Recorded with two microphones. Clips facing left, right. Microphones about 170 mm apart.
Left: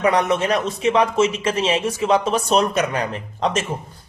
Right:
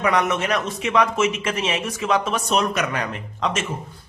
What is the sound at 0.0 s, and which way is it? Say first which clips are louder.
Speech: left 3 dB; 30° left (ahead or behind).